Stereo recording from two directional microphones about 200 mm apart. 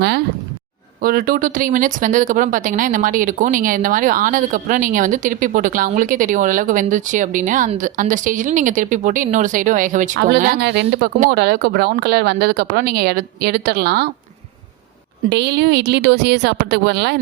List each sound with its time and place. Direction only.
1.0 s speech: 45° right (ahead or behind)
15.3 s a woman's voice: 60° right (ahead or behind)